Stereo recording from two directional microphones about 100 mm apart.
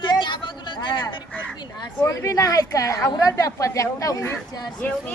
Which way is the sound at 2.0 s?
30° left (ahead or behind).